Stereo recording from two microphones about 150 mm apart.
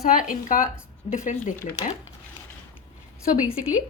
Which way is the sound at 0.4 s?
65° left (ahead or behind).